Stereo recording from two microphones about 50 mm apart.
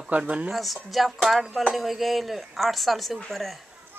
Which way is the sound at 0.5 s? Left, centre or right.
Centre.